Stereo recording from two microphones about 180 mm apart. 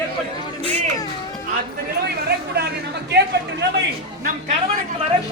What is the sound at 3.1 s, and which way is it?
Speech, 70° right (ahead or behind).